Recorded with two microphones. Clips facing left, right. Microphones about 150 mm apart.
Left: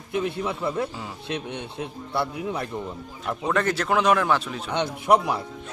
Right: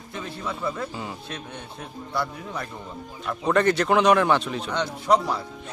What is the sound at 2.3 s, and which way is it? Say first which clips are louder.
Speech: left 5 dB; 15° left (ahead or behind).